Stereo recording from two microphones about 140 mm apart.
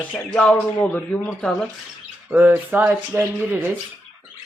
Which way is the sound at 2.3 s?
10° right (ahead or behind).